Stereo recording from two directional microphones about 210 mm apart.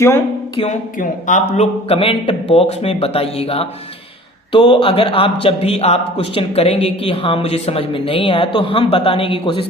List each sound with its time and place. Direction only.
0.0 s speech: 10° left (ahead or behind)
0.6 s speech: 35° left (ahead or behind)